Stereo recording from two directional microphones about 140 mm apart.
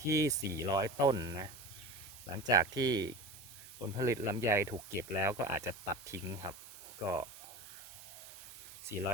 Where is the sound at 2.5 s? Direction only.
25° right (ahead or behind).